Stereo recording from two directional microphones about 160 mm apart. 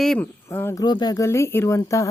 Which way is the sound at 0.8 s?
25° left (ahead or behind).